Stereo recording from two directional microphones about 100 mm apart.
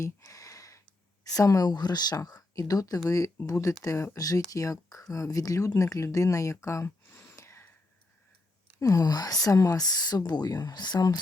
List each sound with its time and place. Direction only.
0.2 s a sound: 35° left (ahead or behind)
1.3 s speech: 35° left (ahead or behind)
8.8 s speech: 35° left (ahead or behind)